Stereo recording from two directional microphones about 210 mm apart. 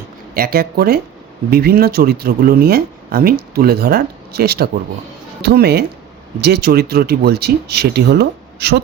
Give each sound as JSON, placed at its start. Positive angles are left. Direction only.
{"t": 0.3, "sound": "speech", "side_deg": -45}